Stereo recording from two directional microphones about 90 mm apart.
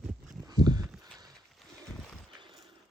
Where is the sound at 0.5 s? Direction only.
50° right (ahead or behind).